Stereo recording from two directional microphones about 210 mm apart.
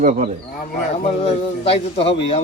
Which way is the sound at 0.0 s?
35° right (ahead or behind).